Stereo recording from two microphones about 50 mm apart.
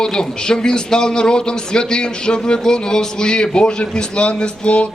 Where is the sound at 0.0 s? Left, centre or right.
Centre.